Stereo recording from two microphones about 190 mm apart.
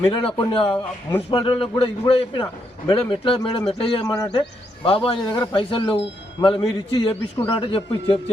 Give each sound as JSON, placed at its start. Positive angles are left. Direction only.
{"t": 0.1, "sound": "speech", "side_deg": 25}